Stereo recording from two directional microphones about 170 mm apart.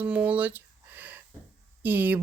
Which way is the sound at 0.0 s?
10° right (ahead or behind).